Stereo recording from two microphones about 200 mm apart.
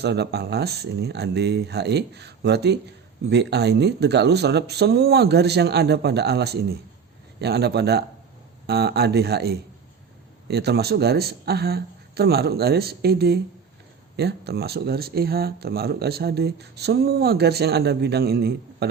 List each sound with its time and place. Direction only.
0.0 s speech: 55° right (ahead or behind)